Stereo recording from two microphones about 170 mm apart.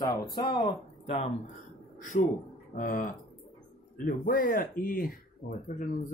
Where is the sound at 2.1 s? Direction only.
60° left (ahead or behind).